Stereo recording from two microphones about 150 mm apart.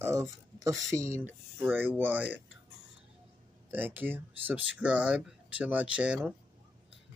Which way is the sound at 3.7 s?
10° right (ahead or behind).